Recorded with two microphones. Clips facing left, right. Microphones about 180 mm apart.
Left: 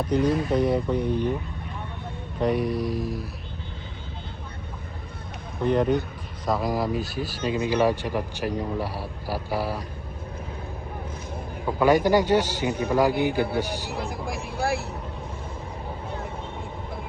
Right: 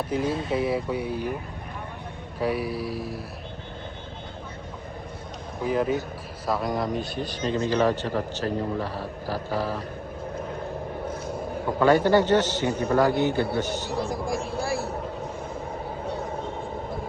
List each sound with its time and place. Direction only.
0.0 s speech: 5° right (ahead or behind)
2.4 s speech: 5° right (ahead or behind)
5.6 s a man's voice: 5° right (ahead or behind); by 9.8 s 10° left (ahead or behind)
11.8 s a man's voice: 10° left (ahead or behind)
14.1 s speech: 60° left (ahead or behind)